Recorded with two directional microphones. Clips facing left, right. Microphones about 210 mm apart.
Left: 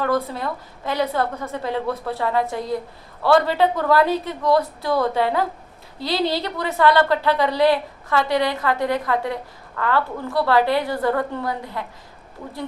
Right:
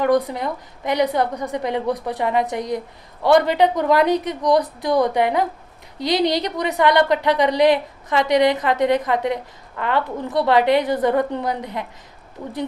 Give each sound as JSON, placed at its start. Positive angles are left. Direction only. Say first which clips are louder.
{"t": 0.0, "sound": "a woman's voice", "louder": "right 4 dB", "side_deg": -15}